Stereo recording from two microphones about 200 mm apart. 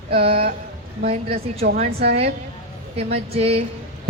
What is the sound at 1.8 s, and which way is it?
Speech, 50° right (ahead or behind).